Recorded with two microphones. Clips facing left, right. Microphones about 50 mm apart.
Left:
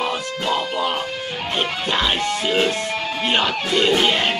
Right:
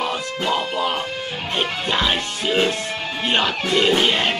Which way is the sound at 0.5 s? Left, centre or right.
Centre.